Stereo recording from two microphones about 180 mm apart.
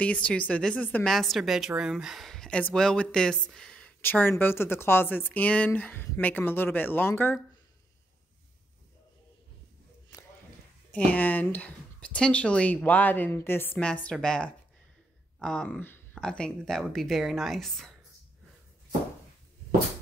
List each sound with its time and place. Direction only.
0.0 s speech: 5° left (ahead or behind)
10.1 s a sound: 15° left (ahead or behind)
10.9 s speech: 10° left (ahead or behind)